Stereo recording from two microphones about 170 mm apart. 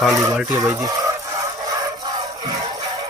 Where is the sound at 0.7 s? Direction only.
20° right (ahead or behind).